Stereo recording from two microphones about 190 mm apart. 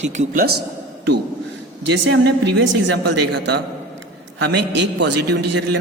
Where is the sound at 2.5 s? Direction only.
65° right (ahead or behind).